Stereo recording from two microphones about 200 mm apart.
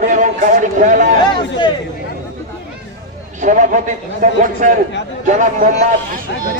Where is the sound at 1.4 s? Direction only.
25° left (ahead or behind).